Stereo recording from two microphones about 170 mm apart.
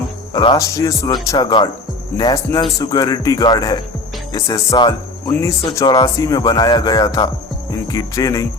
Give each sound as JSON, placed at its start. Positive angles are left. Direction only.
{"t": 0.3, "sound": "speech", "side_deg": 25}